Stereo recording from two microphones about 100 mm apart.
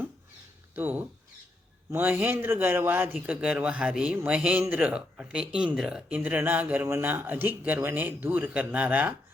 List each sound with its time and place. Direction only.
0.8 s a man's voice: 15° right (ahead or behind)